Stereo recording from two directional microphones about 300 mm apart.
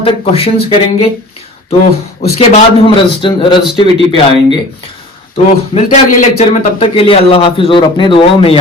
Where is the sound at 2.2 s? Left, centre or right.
Centre.